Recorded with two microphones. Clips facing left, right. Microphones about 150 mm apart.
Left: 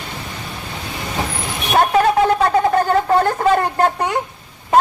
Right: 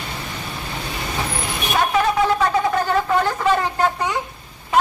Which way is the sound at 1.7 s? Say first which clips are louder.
Left 5 dB; 50° left (ahead or behind).